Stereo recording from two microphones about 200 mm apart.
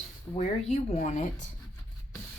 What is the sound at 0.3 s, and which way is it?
Speech, 15° left (ahead or behind).